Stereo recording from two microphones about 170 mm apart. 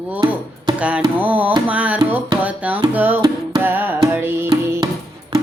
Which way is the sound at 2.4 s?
10° right (ahead or behind).